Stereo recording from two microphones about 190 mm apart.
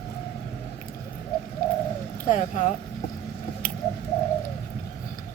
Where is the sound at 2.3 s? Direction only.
40° left (ahead or behind).